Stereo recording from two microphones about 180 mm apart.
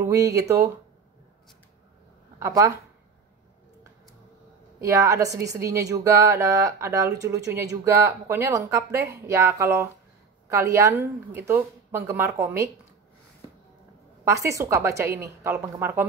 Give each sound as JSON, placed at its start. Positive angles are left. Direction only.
{"t": 0.0, "sound": "a woman's voice", "side_deg": -20}
{"t": 2.3, "sound": "speech", "side_deg": -15}
{"t": 4.7, "sound": "a woman's voice", "side_deg": -15}
{"t": 14.2, "sound": "a woman's voice", "side_deg": -15}